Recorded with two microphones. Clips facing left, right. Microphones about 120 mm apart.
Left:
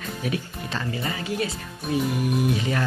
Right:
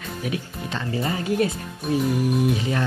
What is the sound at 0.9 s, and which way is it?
Speech, 35° right (ahead or behind).